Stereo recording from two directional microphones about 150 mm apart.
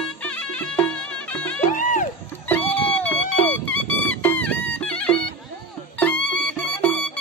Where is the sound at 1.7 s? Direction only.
60° left (ahead or behind).